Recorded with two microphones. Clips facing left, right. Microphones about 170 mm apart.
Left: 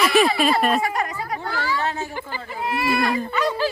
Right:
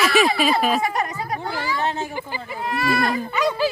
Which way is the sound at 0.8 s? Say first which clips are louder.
Right 1 dB; 20° right (ahead or behind).